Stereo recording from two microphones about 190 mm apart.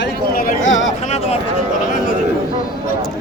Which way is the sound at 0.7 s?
75° left (ahead or behind).